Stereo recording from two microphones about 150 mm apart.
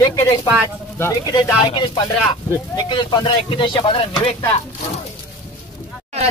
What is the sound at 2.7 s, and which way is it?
Speech, 30° left (ahead or behind).